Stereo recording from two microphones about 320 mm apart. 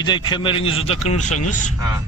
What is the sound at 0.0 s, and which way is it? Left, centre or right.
A man's voice, centre.